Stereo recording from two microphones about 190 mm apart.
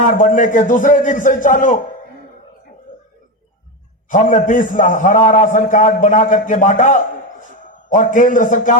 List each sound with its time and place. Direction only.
0.0 s a man's voice: 45° left (ahead or behind)
4.1 s a man's voice: 45° left (ahead or behind)